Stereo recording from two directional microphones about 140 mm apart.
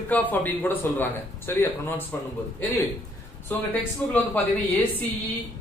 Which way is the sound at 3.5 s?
10° left (ahead or behind).